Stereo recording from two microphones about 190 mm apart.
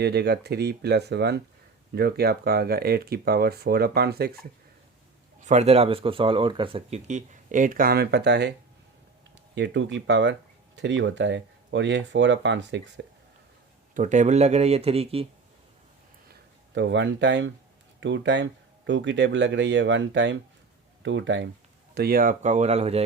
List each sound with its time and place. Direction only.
0.0 s speech: 60° right (ahead or behind)
5.4 s speech: 35° right (ahead or behind); by 8.5 s 65° right (ahead or behind)
9.6 s speech: 70° right (ahead or behind)
13.9 s speech: 40° right (ahead or behind)
16.3 s speech: 65° right (ahead or behind)
21.9 s speech: 50° right (ahead or behind); by 23.0 s 35° right (ahead or behind)